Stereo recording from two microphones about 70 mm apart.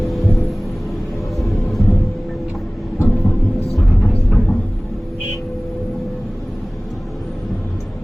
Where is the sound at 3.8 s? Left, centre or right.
Centre.